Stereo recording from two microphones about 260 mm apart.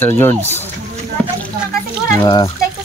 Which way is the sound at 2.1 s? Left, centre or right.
Centre.